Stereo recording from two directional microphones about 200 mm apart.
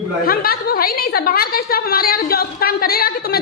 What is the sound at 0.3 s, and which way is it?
A woman's voice, 50° left (ahead or behind).